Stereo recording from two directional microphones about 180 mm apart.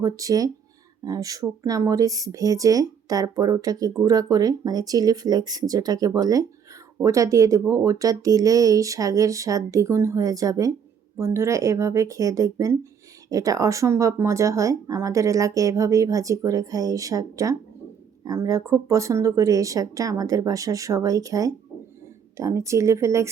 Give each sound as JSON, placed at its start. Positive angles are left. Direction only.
{"t": 0.0, "sound": "speech", "side_deg": -20}